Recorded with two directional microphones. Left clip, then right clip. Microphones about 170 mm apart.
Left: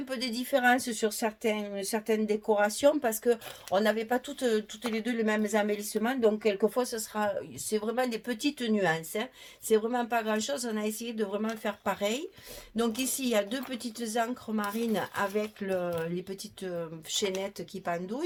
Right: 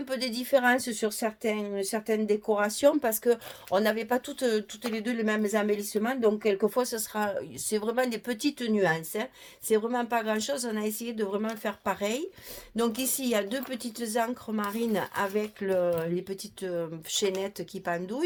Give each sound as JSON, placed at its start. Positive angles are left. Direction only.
{"t": 0.1, "sound": "speech", "side_deg": -35}